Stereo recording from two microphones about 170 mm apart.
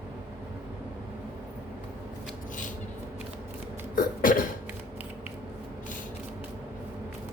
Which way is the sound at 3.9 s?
55° left (ahead or behind).